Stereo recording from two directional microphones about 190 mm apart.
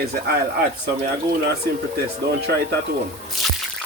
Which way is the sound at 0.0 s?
55° right (ahead or behind).